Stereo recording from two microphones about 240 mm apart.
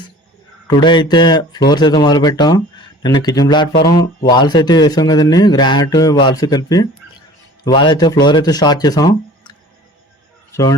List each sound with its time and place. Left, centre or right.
0.7 s speech: centre
10.5 s a man's voice: centre